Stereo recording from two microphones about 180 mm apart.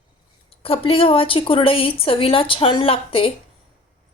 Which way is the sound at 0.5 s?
30° left (ahead or behind).